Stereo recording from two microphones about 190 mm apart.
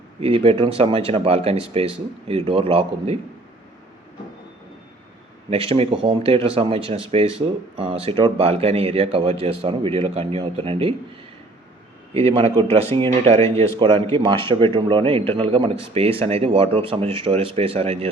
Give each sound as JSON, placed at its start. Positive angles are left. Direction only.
{"t": 0.2, "sound": "speech", "side_deg": -30}
{"t": 5.5, "sound": "speech", "side_deg": -30}
{"t": 12.1, "sound": "speech", "side_deg": -30}